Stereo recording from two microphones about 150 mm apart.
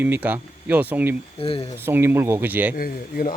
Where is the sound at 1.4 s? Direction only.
35° left (ahead or behind).